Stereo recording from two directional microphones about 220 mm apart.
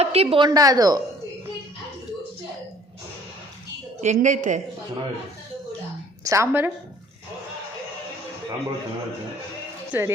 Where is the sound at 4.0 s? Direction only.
35° right (ahead or behind).